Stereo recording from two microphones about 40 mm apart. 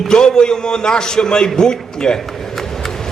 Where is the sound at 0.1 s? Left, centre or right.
Centre.